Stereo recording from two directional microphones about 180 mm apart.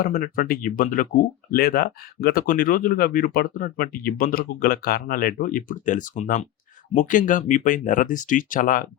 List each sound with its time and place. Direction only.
0.0 s speech: 50° left (ahead or behind)